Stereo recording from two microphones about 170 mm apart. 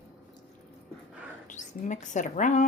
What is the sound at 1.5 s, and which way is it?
Speech, 45° left (ahead or behind).